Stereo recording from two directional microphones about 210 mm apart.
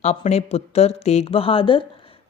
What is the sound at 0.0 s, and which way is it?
Speech, 30° left (ahead or behind).